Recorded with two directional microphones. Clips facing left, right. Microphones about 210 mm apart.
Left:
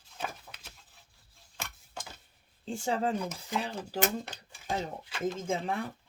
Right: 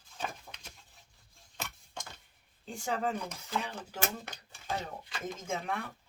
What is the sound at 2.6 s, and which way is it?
Speech, 30° left (ahead or behind).